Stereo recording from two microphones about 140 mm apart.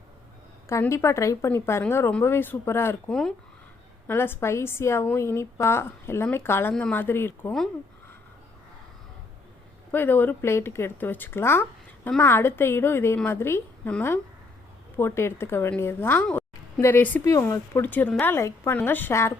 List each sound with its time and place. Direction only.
0.7 s speech: 20° left (ahead or behind)
3.1 s speech: 5° left (ahead or behind)
4.0 s speech: 15° left (ahead or behind)
9.9 s speech: 15° left (ahead or behind)
14.9 s speech: 20° left (ahead or behind)
16.2 s a sound: 5° left (ahead or behind)
16.8 s speech: 15° left (ahead or behind)
17.2 s speech: 25° left (ahead or behind)